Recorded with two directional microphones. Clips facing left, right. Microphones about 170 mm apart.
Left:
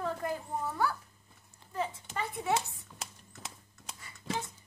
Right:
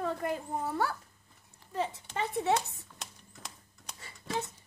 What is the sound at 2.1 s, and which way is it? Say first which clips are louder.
Speech: right 4 dB; 25° right (ahead or behind).